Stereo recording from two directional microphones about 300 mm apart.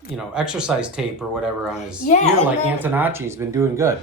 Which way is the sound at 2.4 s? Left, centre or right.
Centre.